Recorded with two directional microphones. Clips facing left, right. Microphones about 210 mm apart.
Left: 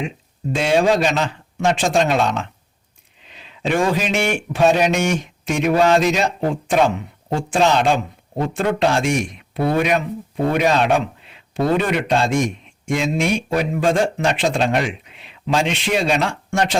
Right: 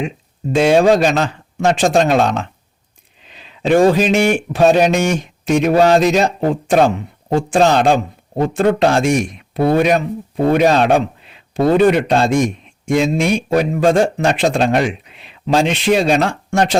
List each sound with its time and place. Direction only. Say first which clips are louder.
0.5 s a man's voice: right 5 dB; 45° right (ahead or behind)